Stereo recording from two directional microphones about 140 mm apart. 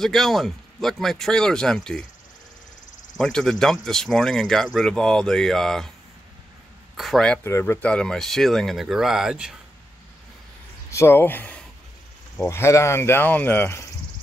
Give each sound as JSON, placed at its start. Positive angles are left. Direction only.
{"t": 0.0, "sound": "speech", "side_deg": 0}
{"t": 3.2, "sound": "speech", "side_deg": 5}
{"t": 7.0, "sound": "speech", "side_deg": 0}
{"t": 7.4, "sound": "speech", "side_deg": 20}
{"t": 10.9, "sound": "speech", "side_deg": 20}